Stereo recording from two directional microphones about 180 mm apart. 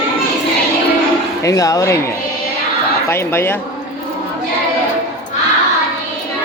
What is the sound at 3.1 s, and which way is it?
Speech, 15° left (ahead or behind).